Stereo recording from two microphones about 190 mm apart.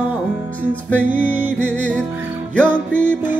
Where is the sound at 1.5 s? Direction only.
5° left (ahead or behind).